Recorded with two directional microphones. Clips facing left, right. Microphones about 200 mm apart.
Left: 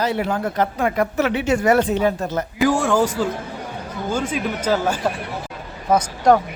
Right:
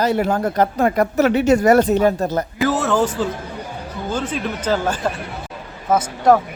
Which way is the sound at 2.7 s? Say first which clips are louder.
Left 1 dB; 10° left (ahead or behind).